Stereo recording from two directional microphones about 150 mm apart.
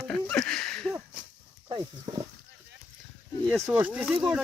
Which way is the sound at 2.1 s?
30° right (ahead or behind).